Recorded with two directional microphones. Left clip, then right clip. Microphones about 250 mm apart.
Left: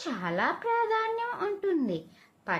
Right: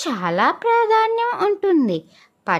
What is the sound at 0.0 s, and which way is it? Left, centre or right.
A child's voice, right.